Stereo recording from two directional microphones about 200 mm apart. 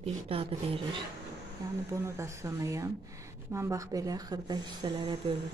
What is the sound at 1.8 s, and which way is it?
Speech, 15° right (ahead or behind).